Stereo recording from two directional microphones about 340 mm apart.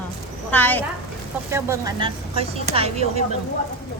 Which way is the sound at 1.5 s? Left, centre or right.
Centre.